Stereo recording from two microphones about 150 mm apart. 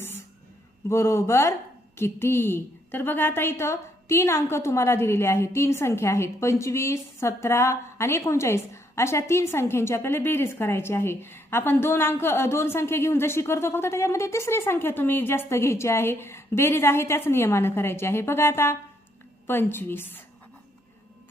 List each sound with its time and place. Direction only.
0.9 s a woman's voice: 15° left (ahead or behind)